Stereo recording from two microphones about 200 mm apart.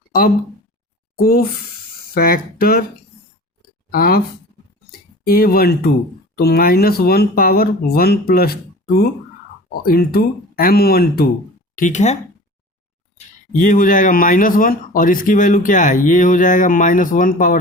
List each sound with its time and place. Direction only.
1.1 s speech: 45° left (ahead or behind)
3.9 s speech: 50° left (ahead or behind)
9.8 s speech: 50° left (ahead or behind)
11.8 s speech: 35° left (ahead or behind)
13.1 s speech: 40° left (ahead or behind)